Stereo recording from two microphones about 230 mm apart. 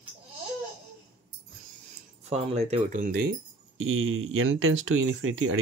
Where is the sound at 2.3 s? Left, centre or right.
Right.